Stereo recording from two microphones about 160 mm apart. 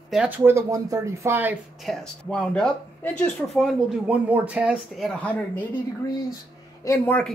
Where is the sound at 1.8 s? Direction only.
Centre (ahead or behind).